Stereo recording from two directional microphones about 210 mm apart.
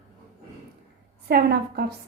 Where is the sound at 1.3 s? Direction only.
50° right (ahead or behind).